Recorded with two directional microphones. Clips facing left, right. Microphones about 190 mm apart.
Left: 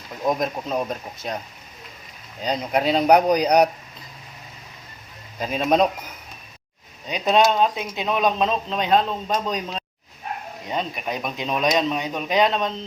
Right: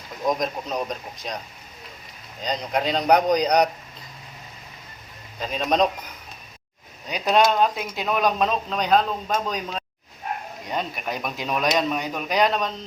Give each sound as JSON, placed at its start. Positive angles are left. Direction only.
{"t": 0.3, "sound": "a man's voice", "side_deg": 5}
{"t": 2.4, "sound": "speech", "side_deg": 10}
{"t": 5.4, "sound": "speech", "side_deg": 5}
{"t": 7.1, "sound": "a man's voice", "side_deg": 0}
{"t": 10.7, "sound": "a man's voice", "side_deg": 0}